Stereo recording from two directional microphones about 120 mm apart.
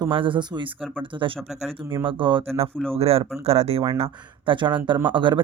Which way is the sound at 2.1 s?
45° right (ahead or behind).